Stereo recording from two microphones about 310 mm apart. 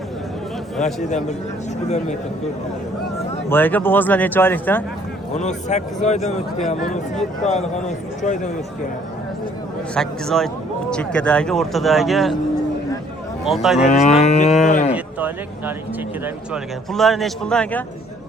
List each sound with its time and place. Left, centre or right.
3.5 s speech: centre
5.3 s a man's voice: left
9.9 s speech: centre
13.4 s speech: centre
14.0 s a man's voice: left
14.9 s speech: centre